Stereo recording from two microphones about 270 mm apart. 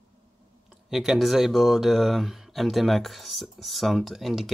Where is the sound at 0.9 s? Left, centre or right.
Centre.